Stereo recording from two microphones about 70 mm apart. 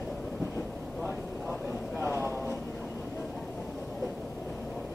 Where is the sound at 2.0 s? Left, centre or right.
Right.